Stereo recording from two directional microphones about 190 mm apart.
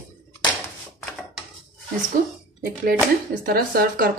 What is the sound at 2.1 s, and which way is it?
Speech, 50° right (ahead or behind).